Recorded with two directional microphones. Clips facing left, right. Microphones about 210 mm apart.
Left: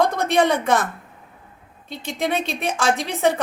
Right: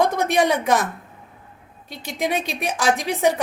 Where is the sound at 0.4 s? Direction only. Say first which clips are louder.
Even; 10° right (ahead or behind).